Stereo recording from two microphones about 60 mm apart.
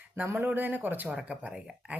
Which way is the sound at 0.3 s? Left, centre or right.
Right.